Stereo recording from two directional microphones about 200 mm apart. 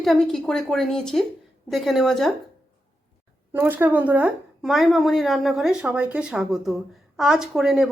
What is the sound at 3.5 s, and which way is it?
A woman's voice, 10° right (ahead or behind).